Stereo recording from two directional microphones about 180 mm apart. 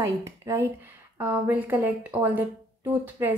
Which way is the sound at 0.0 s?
15° right (ahead or behind).